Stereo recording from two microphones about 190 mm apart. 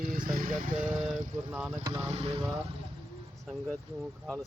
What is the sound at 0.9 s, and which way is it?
Speech, centre (ahead or behind).